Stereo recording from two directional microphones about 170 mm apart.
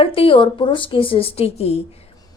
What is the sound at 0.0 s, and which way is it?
Speech, 35° left (ahead or behind).